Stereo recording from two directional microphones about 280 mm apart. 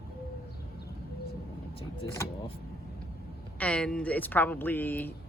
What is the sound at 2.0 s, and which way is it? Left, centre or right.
Speech, centre.